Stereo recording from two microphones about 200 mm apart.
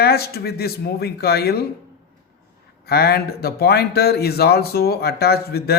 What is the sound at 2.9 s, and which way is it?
Speech, 55° left (ahead or behind).